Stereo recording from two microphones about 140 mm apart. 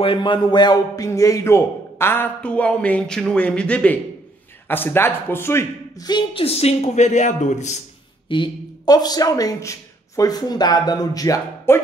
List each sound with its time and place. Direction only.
0.0 s a man's voice: 35° left (ahead or behind); by 7.7 s 60° left (ahead or behind)
8.3 s speech: 30° left (ahead or behind)